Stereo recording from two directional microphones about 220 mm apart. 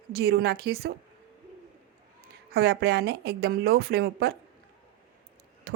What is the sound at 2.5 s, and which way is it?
Speech, 45° right (ahead or behind).